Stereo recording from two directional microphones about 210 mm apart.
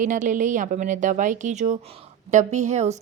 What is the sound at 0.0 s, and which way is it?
A woman's voice, 40° right (ahead or behind).